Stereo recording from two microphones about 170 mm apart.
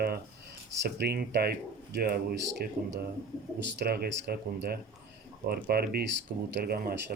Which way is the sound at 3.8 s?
75° right (ahead or behind).